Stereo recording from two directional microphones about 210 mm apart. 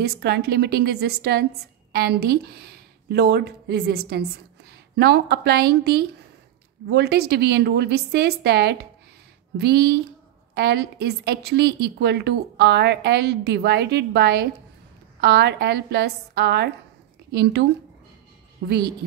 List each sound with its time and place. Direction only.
0.0 s a woman's voice: 50° right (ahead or behind)
18.7 s a woman's voice: 50° right (ahead or behind)